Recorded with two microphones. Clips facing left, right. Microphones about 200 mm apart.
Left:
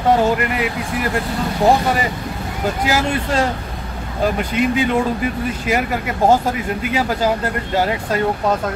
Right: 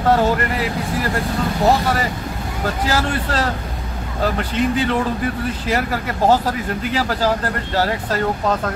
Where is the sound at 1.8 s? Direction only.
15° left (ahead or behind).